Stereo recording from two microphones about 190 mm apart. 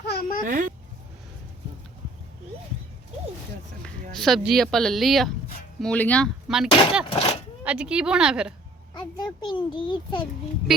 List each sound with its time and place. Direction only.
0.0 s a sound: 55° left (ahead or behind)
0.4 s speech: 45° right (ahead or behind)
4.1 s speech: centre (ahead or behind)
7.1 s speech: 30° left (ahead or behind)
7.6 s speech: 5° right (ahead or behind)
9.0 s a child's voice: 25° left (ahead or behind)